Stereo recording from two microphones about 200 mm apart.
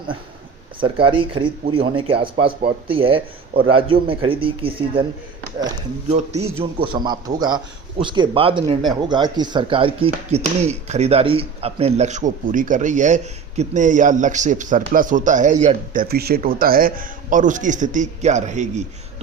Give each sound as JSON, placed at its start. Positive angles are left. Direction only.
{"t": 0.8, "sound": "a man's voice", "side_deg": -25}
{"t": 2.5, "sound": "speech", "side_deg": -50}
{"t": 2.8, "sound": "a man's voice", "side_deg": -25}
{"t": 6.6, "sound": "a man's voice", "side_deg": -25}
{"t": 10.1, "sound": "speech", "side_deg": -35}